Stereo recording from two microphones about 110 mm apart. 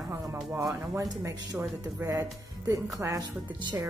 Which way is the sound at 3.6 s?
40° right (ahead or behind).